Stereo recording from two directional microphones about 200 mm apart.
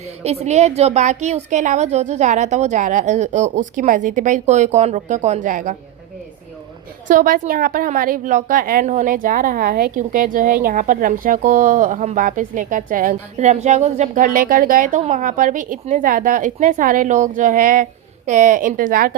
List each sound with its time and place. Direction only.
0.2 s a woman's voice: 35° right (ahead or behind)
7.1 s a woman's voice: 40° right (ahead or behind)